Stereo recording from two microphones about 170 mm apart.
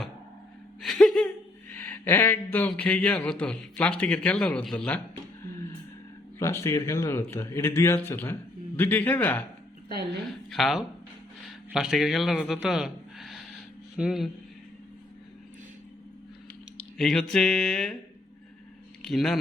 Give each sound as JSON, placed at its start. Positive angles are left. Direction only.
{"t": 0.8, "sound": "a sound", "side_deg": 0}
{"t": 1.7, "sound": "a man's voice", "side_deg": 10}
{"t": 6.4, "sound": "a man's voice", "side_deg": 15}
{"t": 9.9, "sound": "a woman's voice", "side_deg": -85}
{"t": 10.5, "sound": "mantra", "side_deg": 0}
{"t": 11.7, "sound": "speech", "side_deg": -5}
{"t": 17.0, "sound": "mantra", "side_deg": 0}
{"t": 19.0, "sound": "mantra", "side_deg": 0}